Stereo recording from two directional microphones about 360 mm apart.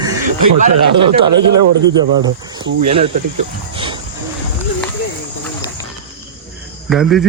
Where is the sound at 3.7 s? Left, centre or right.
Centre.